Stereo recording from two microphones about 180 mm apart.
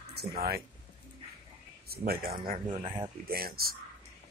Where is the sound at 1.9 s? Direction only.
60° right (ahead or behind).